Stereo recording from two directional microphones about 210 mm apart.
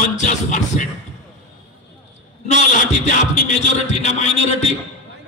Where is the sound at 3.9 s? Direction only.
30° left (ahead or behind).